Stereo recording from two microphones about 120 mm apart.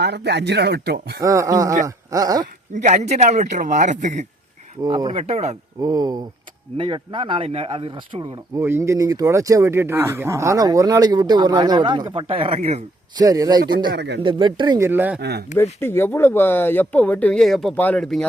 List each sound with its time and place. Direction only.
1.2 s speech: 30° right (ahead or behind)
2.7 s speech: 75° right (ahead or behind)
4.8 s speech: 30° right (ahead or behind)
5.1 s speech: 65° right (ahead or behind)
5.8 s speech: 30° right (ahead or behind)
6.7 s speech: 45° right (ahead or behind)
8.5 s speech: 25° right (ahead or behind); by 12.0 s 40° right (ahead or behind)
12.1 s speech: 50° right (ahead or behind)
13.1 s speech: 30° right (ahead or behind)
14.8 s speech: 20° right (ahead or behind)
15.5 s speech: 20° left (ahead or behind)
17.4 s speech: centre (ahead or behind)